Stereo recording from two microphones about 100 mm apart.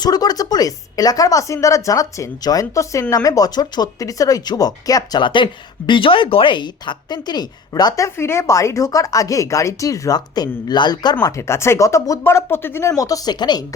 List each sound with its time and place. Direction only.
0.0 s speech: 40° left (ahead or behind)
5.2 s speech: 55° left (ahead or behind)
8.0 s speech: 25° left (ahead or behind); by 11.3 s 45° left (ahead or behind)
11.3 s speech: 25° left (ahead or behind)
13.0 s speech: 35° left (ahead or behind)